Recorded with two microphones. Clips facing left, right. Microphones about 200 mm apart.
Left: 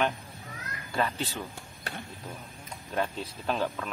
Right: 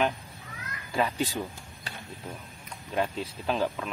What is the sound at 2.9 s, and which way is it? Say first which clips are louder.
Speech: right 2 dB; centre (ahead or behind).